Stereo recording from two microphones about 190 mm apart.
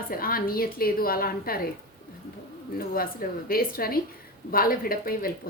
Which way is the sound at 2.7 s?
50° left (ahead or behind).